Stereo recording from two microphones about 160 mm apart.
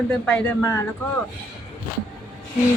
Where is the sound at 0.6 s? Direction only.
20° left (ahead or behind).